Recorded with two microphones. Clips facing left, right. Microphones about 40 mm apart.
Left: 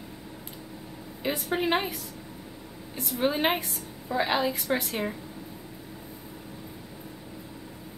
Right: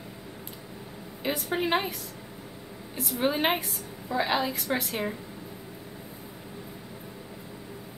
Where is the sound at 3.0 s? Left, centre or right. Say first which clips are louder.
Even; centre.